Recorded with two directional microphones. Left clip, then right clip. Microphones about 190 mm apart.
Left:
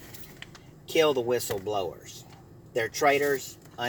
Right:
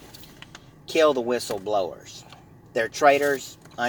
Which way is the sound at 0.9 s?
30° right (ahead or behind).